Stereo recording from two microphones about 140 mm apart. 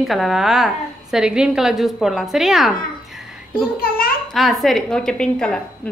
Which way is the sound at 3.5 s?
90° left.